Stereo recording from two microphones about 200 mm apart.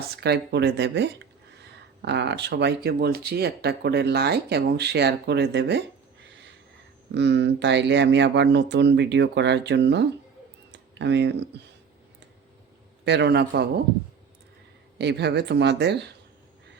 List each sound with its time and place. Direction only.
0.0 s speech: 55° right (ahead or behind)
7.1 s speech: 60° right (ahead or behind)
10.7 s a sound: 60° right (ahead or behind)
13.1 s speech: 60° right (ahead or behind)
14.9 s speech: 60° right (ahead or behind)